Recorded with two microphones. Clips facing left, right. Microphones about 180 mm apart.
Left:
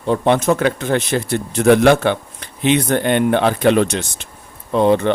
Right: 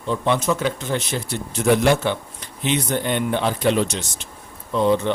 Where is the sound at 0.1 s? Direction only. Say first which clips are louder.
Left 6 dB; 55° left (ahead or behind).